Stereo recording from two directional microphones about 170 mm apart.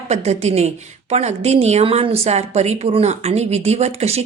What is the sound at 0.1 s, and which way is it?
A woman's voice, 40° right (ahead or behind).